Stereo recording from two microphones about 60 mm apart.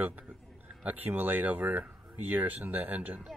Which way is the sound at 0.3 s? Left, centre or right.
Right.